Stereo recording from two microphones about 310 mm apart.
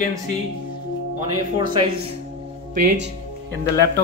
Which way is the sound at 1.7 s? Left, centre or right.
Centre.